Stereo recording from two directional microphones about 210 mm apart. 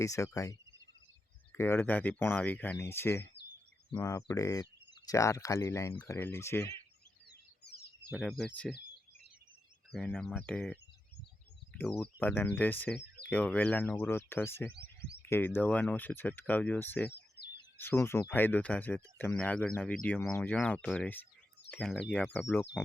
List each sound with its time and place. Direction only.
0.0 s speech: 15° left (ahead or behind)
1.5 s speech: 10° left (ahead or behind)
8.2 s speech: 5° left (ahead or behind)
9.9 s speech: 5° left (ahead or behind)
11.8 s speech: 5° left (ahead or behind)
17.1 s bird: 50° left (ahead or behind)
17.7 s speech: 10° left (ahead or behind)